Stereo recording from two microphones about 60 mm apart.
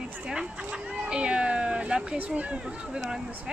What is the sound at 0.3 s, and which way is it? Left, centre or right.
Cat, centre.